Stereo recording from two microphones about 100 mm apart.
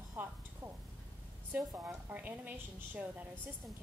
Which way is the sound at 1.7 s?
20° right (ahead or behind).